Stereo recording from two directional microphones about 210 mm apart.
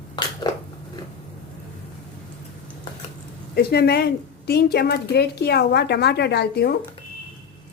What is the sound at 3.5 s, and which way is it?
A woman's voice, 50° left (ahead or behind).